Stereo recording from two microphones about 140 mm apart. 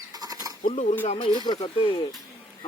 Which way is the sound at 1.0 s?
45° left (ahead or behind).